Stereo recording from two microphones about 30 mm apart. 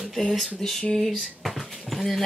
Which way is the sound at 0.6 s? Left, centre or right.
Left.